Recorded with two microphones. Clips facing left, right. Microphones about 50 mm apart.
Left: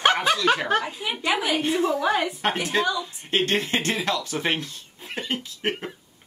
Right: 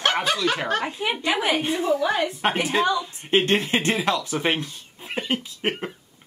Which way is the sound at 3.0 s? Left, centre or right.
Centre.